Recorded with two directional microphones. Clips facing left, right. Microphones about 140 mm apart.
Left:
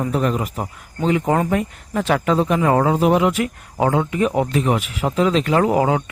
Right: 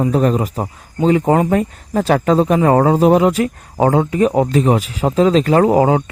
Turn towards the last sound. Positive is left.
turn(degrees=-30)  # may be behind; listen again after turning